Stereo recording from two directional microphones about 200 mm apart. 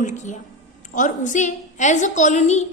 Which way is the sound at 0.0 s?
35° left (ahead or behind).